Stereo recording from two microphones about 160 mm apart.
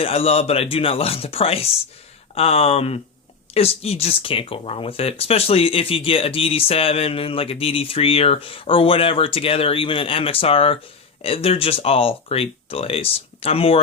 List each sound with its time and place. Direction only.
0.0 s speech: 40° left (ahead or behind)